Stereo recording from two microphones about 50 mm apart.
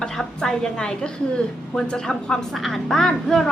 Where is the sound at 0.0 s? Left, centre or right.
Centre.